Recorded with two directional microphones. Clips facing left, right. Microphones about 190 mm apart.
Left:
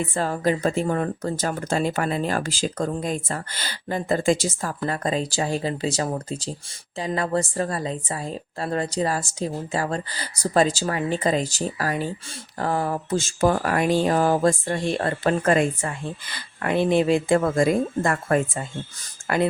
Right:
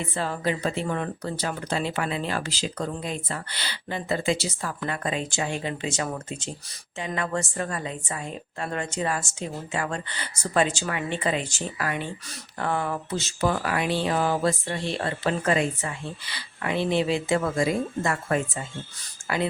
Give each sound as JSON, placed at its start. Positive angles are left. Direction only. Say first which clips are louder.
{"t": 0.1, "sound": "a woman's voice", "louder": "left 4 dB", "side_deg": 45}
{"t": 19.2, "sound": "whispering", "louder": "left 4 dB", "side_deg": 55}